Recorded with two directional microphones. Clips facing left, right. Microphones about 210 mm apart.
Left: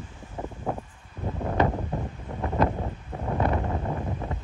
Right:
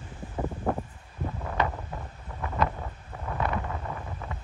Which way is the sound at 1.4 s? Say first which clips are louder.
Left 6 dB; 30° left (ahead or behind).